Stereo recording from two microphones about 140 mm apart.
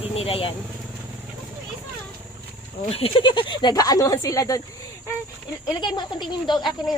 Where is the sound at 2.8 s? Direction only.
45° left (ahead or behind); by 4.6 s 25° left (ahead or behind).